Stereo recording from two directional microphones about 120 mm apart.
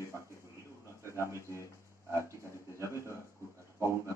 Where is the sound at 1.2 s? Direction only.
25° right (ahead or behind).